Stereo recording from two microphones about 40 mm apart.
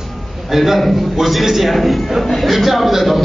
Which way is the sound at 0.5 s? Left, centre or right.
Centre.